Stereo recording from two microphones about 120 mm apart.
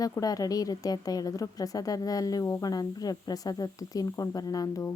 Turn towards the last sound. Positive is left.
turn(degrees=30)  # may be behind; listen again after turning